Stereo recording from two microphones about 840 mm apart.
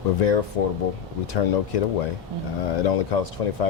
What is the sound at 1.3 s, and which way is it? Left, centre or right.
Speech, left.